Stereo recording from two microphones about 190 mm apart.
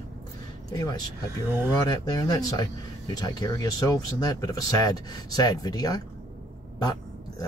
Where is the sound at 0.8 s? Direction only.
15° left (ahead or behind).